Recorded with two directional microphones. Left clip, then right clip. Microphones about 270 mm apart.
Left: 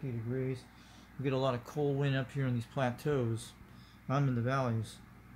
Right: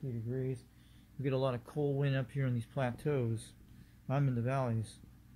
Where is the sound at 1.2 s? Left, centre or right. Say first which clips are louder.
Left 2 dB; centre.